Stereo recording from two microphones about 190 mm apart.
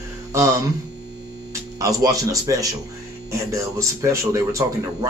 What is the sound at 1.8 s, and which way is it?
A man's voice, 20° right (ahead or behind).